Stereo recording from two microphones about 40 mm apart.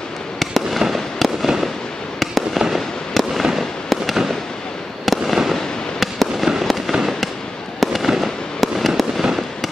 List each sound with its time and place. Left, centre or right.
0.4 s fireworks: centre